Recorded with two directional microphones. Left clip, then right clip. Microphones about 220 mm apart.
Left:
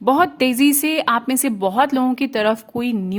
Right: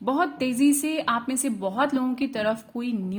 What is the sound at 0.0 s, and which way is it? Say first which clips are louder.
A woman's voice: left 9 dB; 35° left (ahead or behind).